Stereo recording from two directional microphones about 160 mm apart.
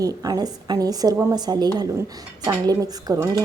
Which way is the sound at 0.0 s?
20° right (ahead or behind).